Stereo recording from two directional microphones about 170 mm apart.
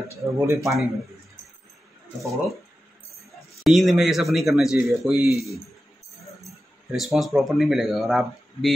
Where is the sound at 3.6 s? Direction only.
Centre (ahead or behind).